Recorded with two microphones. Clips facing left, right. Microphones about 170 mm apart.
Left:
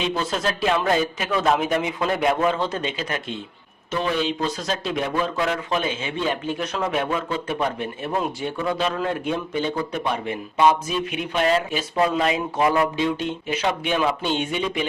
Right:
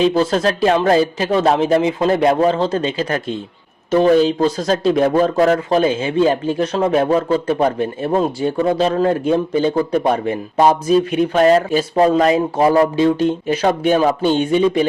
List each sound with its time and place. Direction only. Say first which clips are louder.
0.0 s speech: right 10 dB; 35° right (ahead or behind)